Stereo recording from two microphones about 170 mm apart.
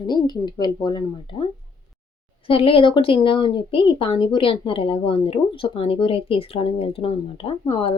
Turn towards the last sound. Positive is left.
turn(degrees=30)  # may be behind; listen again after turning